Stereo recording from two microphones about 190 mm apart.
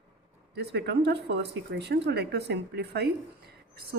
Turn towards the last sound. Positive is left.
turn(degrees=-55)  # may be behind; listen again after turning